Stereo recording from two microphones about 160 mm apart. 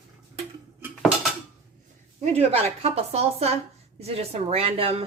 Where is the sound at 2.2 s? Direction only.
40° right (ahead or behind).